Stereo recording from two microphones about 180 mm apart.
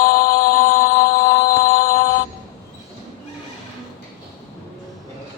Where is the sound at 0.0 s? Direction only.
55° left (ahead or behind).